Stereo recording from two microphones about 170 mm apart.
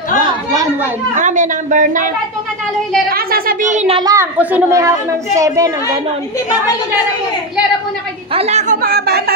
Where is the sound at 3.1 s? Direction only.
60° right (ahead or behind).